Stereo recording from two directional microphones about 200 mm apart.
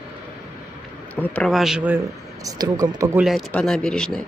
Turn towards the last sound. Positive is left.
turn(degrees=5)  # may be behind; listen again after turning